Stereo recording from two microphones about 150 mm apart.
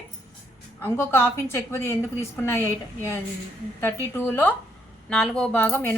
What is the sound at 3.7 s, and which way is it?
Speech, 20° left (ahead or behind).